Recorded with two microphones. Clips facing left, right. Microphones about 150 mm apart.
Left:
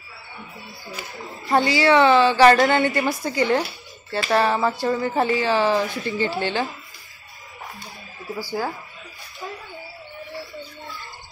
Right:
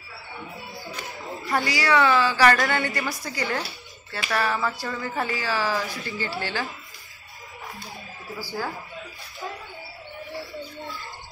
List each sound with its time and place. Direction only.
1.0 s speech: 5° left (ahead or behind)
1.5 s a woman's voice: 25° left (ahead or behind)
8.4 s speech: 15° left (ahead or behind)